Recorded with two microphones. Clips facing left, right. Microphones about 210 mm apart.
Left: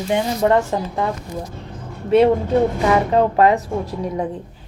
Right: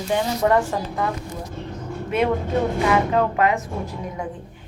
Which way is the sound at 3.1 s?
35° left (ahead or behind).